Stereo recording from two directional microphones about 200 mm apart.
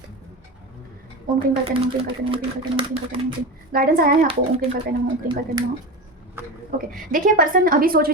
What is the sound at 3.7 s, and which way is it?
Speech, 45° right (ahead or behind).